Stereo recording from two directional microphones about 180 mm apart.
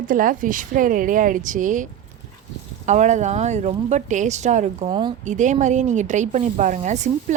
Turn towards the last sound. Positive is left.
turn(degrees=-40)  # may be behind; listen again after turning